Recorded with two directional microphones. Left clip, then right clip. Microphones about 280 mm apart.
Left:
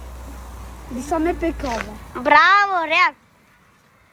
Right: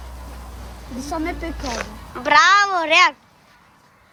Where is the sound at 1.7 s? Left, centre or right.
Centre.